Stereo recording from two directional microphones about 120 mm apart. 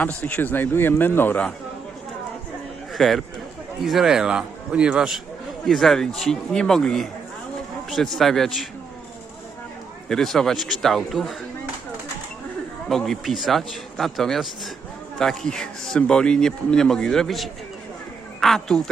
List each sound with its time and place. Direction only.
0.0 s a man's voice: 10° left (ahead or behind)
2.9 s speech: centre (ahead or behind)
10.1 s speech: centre (ahead or behind)
12.9 s a man's voice: 5° left (ahead or behind)